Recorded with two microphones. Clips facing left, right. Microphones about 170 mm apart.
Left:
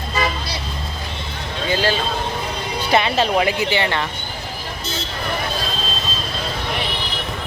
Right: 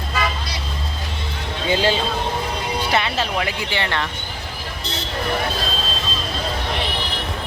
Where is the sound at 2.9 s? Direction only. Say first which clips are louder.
Left 7 dB; 20° left (ahead or behind).